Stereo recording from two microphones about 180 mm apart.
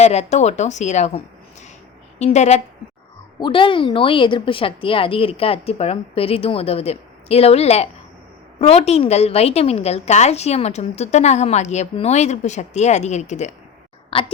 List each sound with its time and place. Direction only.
0.0 s a woman's voice: 35° left (ahead or behind)
3.4 s a woman's voice: 25° left (ahead or behind)